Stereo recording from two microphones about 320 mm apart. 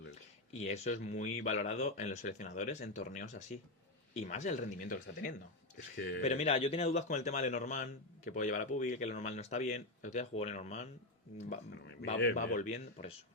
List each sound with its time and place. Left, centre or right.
0.5 s speech: centre